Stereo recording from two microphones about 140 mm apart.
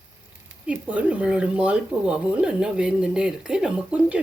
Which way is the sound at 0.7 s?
10° right (ahead or behind).